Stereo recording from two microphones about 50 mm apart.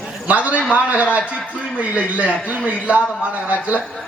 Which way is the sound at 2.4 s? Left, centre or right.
Right.